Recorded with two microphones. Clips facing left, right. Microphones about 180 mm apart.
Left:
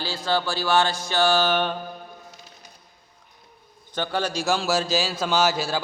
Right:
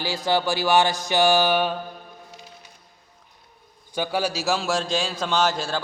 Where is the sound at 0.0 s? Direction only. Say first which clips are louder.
Right 2 dB; 15° right (ahead or behind).